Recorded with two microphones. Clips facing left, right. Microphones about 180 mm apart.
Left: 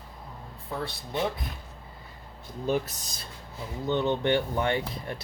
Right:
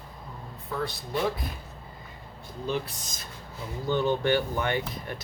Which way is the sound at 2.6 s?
45° left (ahead or behind).